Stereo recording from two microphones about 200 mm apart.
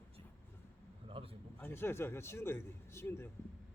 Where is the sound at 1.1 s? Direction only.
25° right (ahead or behind).